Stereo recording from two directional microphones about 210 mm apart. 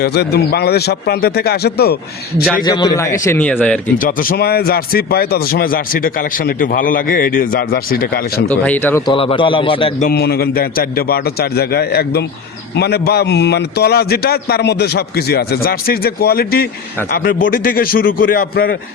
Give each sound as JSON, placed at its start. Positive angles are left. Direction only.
{"t": 0.0, "sound": "a man's voice", "side_deg": 50}
{"t": 2.6, "sound": "a man's voice", "side_deg": 20}
{"t": 3.9, "sound": "a man's voice", "side_deg": 40}
{"t": 8.4, "sound": "a man's voice", "side_deg": 5}
{"t": 9.0, "sound": "a man's voice", "side_deg": 25}
{"t": 10.1, "sound": "a man's voice", "side_deg": 50}